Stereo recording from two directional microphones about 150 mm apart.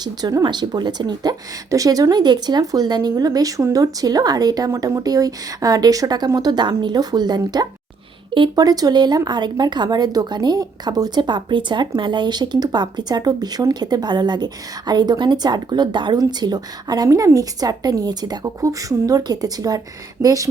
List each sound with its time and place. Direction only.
0.0 s speech: 25° right (ahead or behind)